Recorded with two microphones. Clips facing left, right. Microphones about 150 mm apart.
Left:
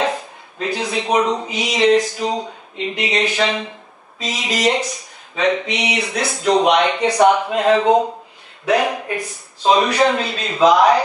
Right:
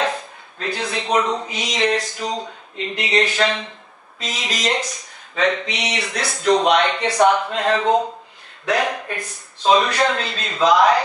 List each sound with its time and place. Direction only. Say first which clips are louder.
0.6 s speech: left 3 dB; 5° left (ahead or behind)